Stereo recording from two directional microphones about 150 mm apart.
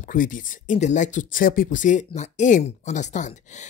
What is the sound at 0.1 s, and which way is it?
Speech, 65° left (ahead or behind).